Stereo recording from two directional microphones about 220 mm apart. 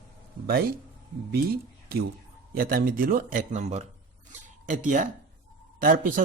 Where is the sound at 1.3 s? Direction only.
45° right (ahead or behind).